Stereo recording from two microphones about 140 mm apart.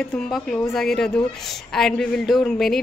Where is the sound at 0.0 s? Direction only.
5° left (ahead or behind).